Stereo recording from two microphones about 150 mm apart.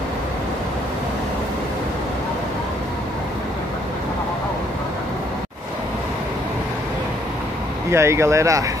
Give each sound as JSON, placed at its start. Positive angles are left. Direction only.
{"t": 7.9, "sound": "speech", "side_deg": -20}